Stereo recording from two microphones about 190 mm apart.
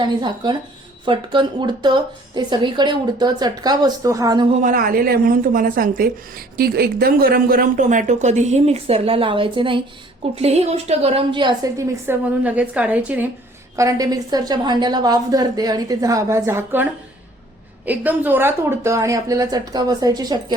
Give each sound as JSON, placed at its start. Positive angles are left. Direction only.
{"t": 0.0, "sound": "a woman's voice", "side_deg": -25}
{"t": 4.5, "sound": "a woman's voice", "side_deg": -45}
{"t": 13.7, "sound": "a woman's voice", "side_deg": -20}
{"t": 17.8, "sound": "speech", "side_deg": -10}